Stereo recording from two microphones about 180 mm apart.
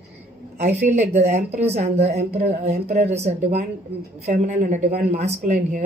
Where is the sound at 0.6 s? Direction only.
40° right (ahead or behind).